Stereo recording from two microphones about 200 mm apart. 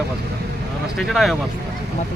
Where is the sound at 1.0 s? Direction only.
Centre (ahead or behind).